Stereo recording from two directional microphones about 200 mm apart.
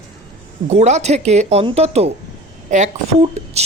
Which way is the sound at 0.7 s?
35° right (ahead or behind).